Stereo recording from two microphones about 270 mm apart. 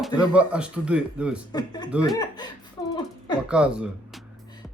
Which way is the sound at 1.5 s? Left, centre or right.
Centre.